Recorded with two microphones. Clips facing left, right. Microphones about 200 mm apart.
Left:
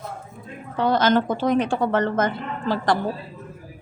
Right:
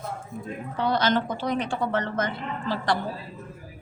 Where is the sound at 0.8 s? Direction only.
50° left (ahead or behind).